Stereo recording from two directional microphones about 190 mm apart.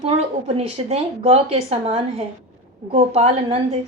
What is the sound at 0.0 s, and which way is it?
A woman's voice, 35° right (ahead or behind).